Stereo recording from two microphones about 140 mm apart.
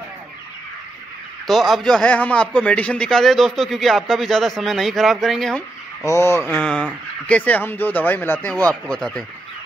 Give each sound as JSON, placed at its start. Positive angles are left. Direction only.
{"t": 1.5, "sound": "a man's voice", "side_deg": 0}
{"t": 6.0, "sound": "a man's voice", "side_deg": 20}